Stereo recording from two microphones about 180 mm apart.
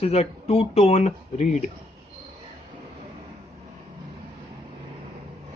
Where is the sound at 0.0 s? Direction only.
35° left (ahead or behind).